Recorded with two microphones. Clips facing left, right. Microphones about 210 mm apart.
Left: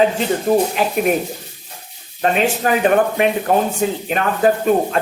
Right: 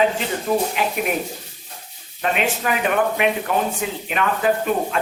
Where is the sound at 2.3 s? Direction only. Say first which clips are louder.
Left 5 dB; 40° left (ahead or behind).